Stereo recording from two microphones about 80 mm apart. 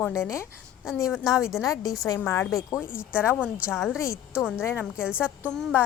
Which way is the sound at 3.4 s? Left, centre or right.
Centre.